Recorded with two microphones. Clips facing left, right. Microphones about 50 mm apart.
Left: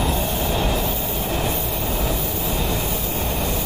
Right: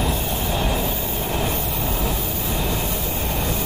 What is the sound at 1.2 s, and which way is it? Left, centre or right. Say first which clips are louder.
Vehicle: even; centre.